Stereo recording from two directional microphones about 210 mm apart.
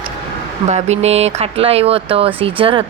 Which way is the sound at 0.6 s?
30° right (ahead or behind).